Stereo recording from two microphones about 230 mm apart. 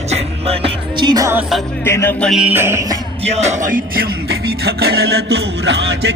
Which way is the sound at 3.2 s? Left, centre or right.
Right.